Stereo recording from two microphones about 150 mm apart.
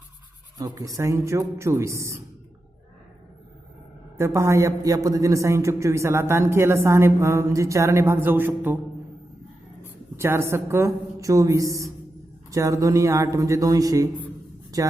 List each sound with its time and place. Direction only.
0.6 s a woman's voice: 20° right (ahead or behind)
4.2 s a woman's voice: 20° right (ahead or behind)
10.2 s a woman's voice: 15° right (ahead or behind)